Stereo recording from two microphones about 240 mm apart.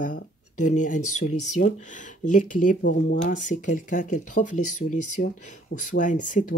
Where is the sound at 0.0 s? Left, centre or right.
Left.